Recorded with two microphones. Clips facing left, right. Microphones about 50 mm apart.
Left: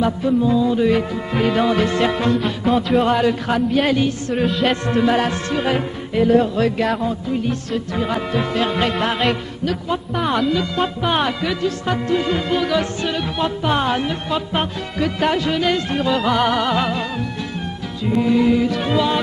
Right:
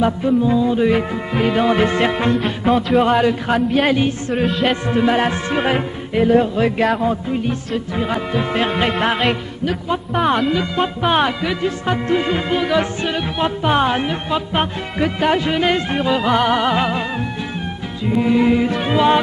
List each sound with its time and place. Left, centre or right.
0.0 s music: centre
1.8 s music: right
2.7 s music: centre
10.2 s speech: centre
10.5 s music: centre